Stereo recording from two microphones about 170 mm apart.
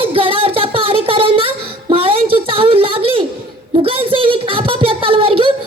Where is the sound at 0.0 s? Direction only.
30° right (ahead or behind).